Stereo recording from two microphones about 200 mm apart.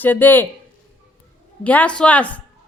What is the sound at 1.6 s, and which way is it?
Speech, 5° left (ahead or behind).